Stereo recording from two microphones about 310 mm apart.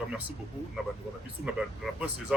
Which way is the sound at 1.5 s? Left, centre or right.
Centre.